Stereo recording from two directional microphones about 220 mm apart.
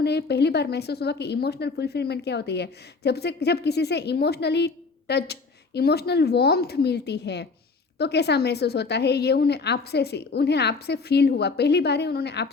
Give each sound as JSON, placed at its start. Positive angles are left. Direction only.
{"t": 0.0, "sound": "a woman's voice", "side_deg": 50}